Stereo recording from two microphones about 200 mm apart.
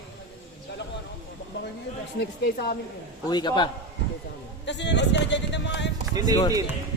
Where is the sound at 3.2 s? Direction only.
20° left (ahead or behind).